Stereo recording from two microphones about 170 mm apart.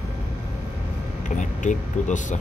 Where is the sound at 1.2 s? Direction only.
50° left (ahead or behind).